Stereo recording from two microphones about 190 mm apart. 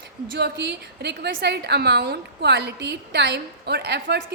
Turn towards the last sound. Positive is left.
turn(degrees=-65)  # may be behind; listen again after turning